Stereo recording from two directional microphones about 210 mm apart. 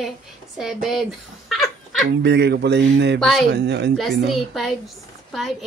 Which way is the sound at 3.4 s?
55° right (ahead or behind).